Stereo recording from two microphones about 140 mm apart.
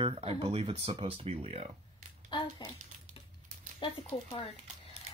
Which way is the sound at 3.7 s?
40° left (ahead or behind).